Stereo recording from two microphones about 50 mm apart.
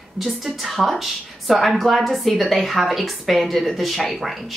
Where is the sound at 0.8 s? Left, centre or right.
Centre.